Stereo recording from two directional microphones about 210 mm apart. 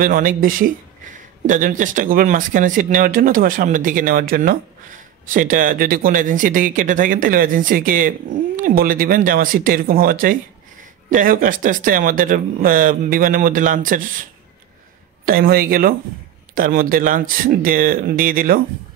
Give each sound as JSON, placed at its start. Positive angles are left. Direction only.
{"t": 0.0, "sound": "speech", "side_deg": -40}
{"t": 15.2, "sound": "speech", "side_deg": -45}